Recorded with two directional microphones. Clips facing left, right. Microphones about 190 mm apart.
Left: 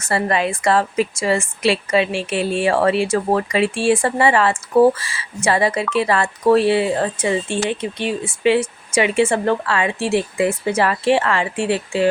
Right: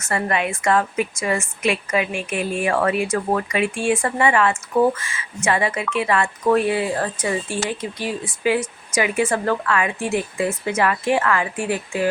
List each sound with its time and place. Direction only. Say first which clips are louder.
0.0 s a woman's voice: left 3 dB; 35° left (ahead or behind)